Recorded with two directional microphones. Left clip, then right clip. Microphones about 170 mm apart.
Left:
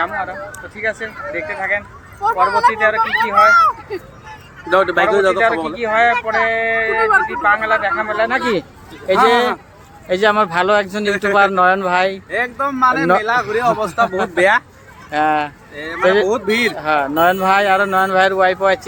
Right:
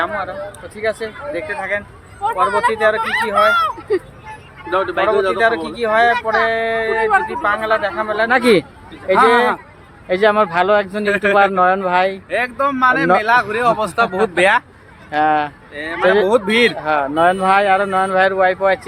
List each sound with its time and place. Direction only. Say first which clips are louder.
0.0 s speech: even; 15° right (ahead or behind)
4.7 s a man's voice: left 3 dB; 45° left (ahead or behind)
5.7 s speech: even; 15° right (ahead or behind)
8.3 s speech: right 5 dB; 55° right (ahead or behind)
9.0 s speech: right 1 dB; 5° left (ahead or behind)
11.1 s speech: right 3 dB; 10° right (ahead or behind)
11.3 s speech: left 2 dB; 5° left (ahead or behind)
12.3 s speech: right 1 dB; 10° right (ahead or behind)
15.1 s speech: right 1 dB; centre (ahead or behind)
15.7 s speech: even; 15° right (ahead or behind)
16.8 s speech: even; 5° left (ahead or behind)